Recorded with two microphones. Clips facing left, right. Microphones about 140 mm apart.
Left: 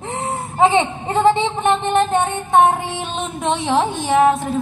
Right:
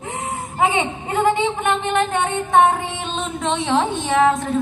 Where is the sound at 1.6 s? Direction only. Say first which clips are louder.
Left 6 dB; 25° left (ahead or behind).